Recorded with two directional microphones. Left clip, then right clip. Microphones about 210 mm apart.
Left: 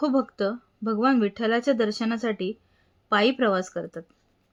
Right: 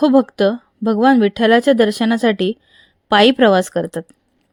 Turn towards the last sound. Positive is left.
turn(degrees=-40)  # may be behind; listen again after turning